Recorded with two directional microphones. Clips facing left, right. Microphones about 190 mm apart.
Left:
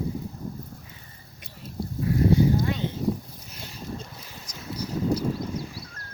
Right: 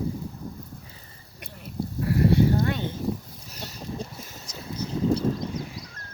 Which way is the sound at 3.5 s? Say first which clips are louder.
Right 4 dB; 40° right (ahead or behind).